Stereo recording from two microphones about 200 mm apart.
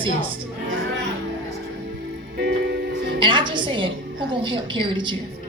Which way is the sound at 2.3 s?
55° right (ahead or behind).